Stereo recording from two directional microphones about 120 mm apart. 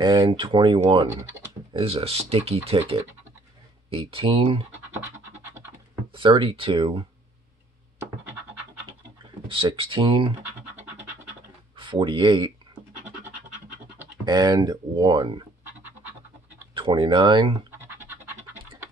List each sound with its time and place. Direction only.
0.0 s speech: 40° right (ahead or behind)
6.1 s speech: 45° right (ahead or behind)
9.5 s speech: 45° right (ahead or behind)
11.7 s speech: 45° right (ahead or behind)
14.2 s speech: 35° right (ahead or behind)
16.0 s music: 15° right (ahead or behind)
16.7 s speech: 45° right (ahead or behind)
17.5 s scratch: 20° right (ahead or behind)